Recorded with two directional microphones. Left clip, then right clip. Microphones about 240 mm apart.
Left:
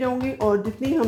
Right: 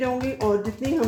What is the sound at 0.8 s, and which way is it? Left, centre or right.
Speech, left.